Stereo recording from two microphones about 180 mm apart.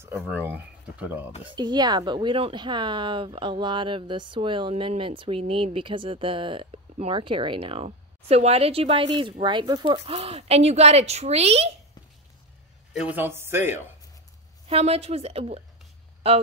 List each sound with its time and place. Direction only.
0.2 s speech: 10° right (ahead or behind)
1.4 s speech: 25° right (ahead or behind)
12.9 s speech: 10° right (ahead or behind)
14.7 s a woman's voice: 35° right (ahead or behind)